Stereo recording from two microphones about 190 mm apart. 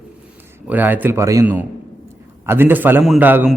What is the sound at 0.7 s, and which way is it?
A man's voice, 10° right (ahead or behind).